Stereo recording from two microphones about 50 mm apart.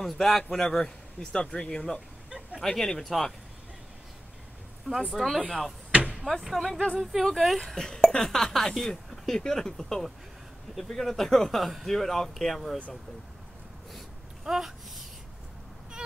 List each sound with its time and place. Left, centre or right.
0.0 s a man's voice: centre
5.1 s speech: centre
5.9 s a sound: right
6.4 s speech: centre
7.7 s speech: centre
14.4 s a sound: centre